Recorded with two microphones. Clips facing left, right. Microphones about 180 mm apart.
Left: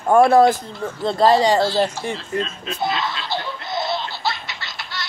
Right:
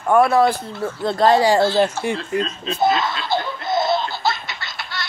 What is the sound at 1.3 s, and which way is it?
Speech, 5° right (ahead or behind).